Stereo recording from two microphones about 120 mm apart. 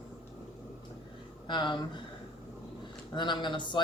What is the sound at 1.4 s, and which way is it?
Speech, 40° left (ahead or behind).